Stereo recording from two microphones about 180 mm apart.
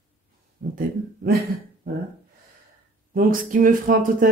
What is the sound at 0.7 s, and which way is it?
Speech, 55° right (ahead or behind).